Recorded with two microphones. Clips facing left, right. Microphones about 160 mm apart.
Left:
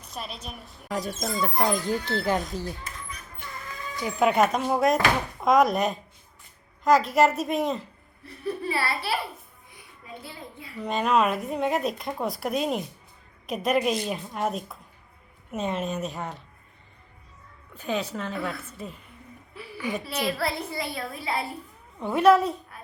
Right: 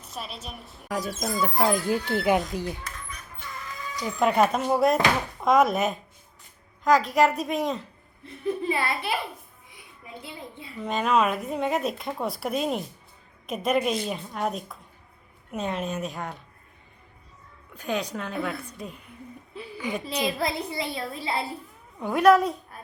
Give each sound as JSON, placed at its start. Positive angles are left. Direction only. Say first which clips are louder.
{"t": 0.0, "sound": "speech", "louder": "even", "side_deg": 0}
{"t": 4.0, "sound": "speech", "louder": "even", "side_deg": 5}
{"t": 7.2, "sound": "speech", "louder": "left 1 dB", "side_deg": 0}
{"t": 8.2, "sound": "speech", "louder": "right 2 dB", "side_deg": -20}
{"t": 10.2, "sound": "a child's voice", "louder": "right 1 dB", "side_deg": -25}
{"t": 10.8, "sound": "speech", "louder": "even", "side_deg": 0}
{"t": 17.7, "sound": "speech", "louder": "even", "side_deg": 5}
{"t": 19.5, "sound": "a child's voice", "louder": "even", "side_deg": -20}
{"t": 21.9, "sound": "a woman's voice", "louder": "even", "side_deg": 0}